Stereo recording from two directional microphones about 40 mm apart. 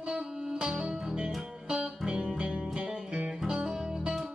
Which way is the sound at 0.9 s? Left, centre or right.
Centre.